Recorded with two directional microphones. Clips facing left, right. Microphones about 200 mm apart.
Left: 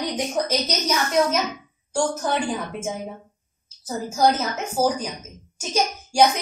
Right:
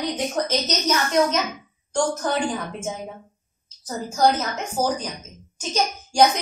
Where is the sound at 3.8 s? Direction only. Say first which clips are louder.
Even; 5° left (ahead or behind).